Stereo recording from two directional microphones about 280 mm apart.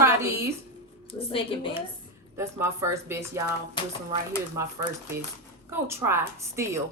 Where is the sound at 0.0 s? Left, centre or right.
Centre.